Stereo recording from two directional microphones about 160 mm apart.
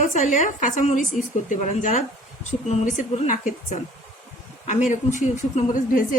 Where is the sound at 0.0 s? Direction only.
50° left (ahead or behind).